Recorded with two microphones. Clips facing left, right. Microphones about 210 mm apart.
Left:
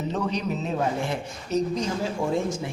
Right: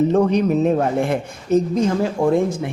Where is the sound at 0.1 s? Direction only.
55° right (ahead or behind).